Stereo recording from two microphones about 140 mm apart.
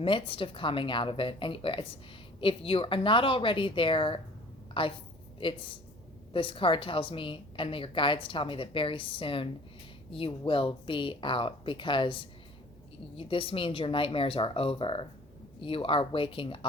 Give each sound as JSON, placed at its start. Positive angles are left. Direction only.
{"t": 0.0, "sound": "a woman's voice", "side_deg": 40}